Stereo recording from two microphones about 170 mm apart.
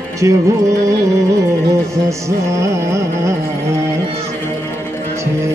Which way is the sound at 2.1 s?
15° right (ahead or behind).